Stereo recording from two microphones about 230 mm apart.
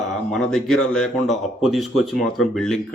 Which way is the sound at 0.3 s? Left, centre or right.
Centre.